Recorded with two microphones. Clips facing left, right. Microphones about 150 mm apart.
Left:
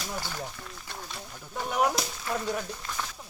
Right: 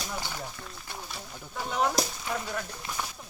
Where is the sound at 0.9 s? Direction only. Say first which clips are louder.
Even; 10° right (ahead or behind).